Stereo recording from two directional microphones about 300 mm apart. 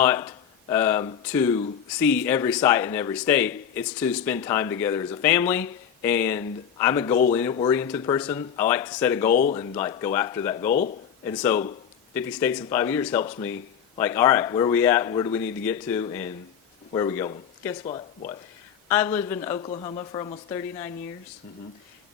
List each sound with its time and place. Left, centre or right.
0.0 s speech: centre
9.3 s speech: left
9.6 s speech: centre
17.8 s speech: centre
18.9 s speech: centre